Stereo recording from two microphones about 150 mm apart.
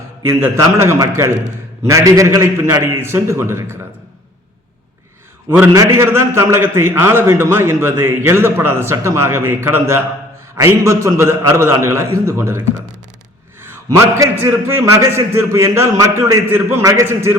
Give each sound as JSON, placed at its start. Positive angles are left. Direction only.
{"t": 0.5, "sound": "a man's voice", "side_deg": -20}
{"t": 5.7, "sound": "a man's voice", "side_deg": -20}